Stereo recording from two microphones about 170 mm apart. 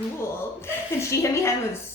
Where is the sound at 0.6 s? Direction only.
15° left (ahead or behind).